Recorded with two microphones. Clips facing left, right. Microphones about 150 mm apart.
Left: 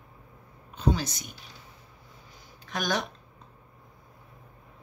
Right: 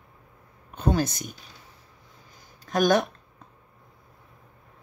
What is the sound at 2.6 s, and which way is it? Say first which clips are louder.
Speech: right 9 dB; 50° right (ahead or behind).